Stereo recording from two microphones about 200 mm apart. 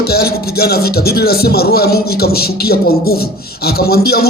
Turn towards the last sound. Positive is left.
turn(degrees=50)  # may be behind; listen again after turning